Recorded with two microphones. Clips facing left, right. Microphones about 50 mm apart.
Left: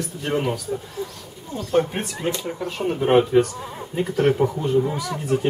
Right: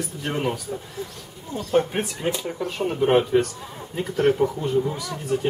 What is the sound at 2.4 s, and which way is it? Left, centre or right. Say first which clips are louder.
Speech: left 1 dB; centre.